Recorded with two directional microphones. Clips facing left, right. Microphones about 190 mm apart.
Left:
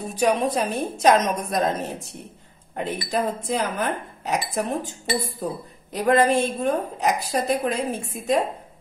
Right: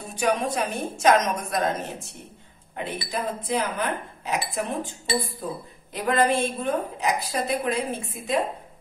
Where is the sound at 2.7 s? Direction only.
45° left (ahead or behind).